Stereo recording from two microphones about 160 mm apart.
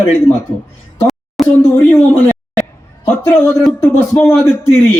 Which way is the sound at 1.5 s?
15° left (ahead or behind).